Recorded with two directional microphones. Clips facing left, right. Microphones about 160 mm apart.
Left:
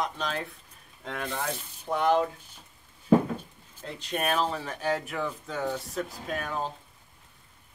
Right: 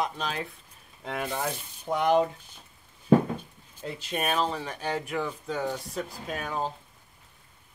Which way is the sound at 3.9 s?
5° right (ahead or behind).